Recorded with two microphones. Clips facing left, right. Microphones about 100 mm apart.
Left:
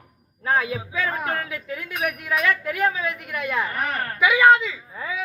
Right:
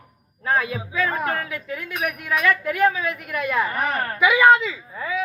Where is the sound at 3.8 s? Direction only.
15° right (ahead or behind).